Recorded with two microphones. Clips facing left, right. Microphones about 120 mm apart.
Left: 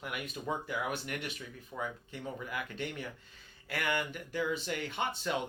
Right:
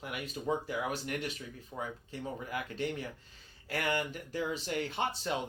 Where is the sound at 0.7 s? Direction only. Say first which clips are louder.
Right 1 dB; 40° right (ahead or behind).